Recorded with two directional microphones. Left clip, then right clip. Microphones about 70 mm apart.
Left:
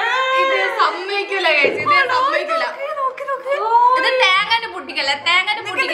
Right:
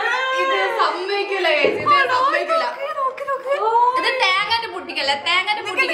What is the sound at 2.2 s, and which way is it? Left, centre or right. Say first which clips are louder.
Chatter: even; centre.